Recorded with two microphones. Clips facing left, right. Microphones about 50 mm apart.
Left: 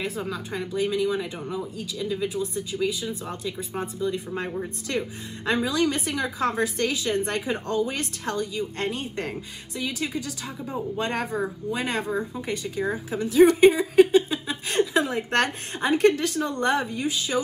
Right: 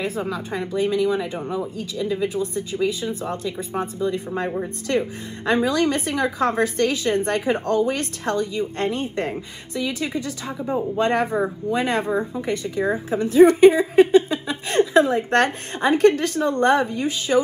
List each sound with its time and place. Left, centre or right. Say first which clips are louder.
0.0 s a woman's voice: right 4 dB; right
11.3 s speech: right 6 dB; right
11.8 s a woman's voice: right 4 dB; right